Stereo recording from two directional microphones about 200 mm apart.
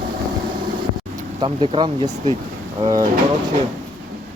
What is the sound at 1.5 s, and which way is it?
Speech, 30° right (ahead or behind).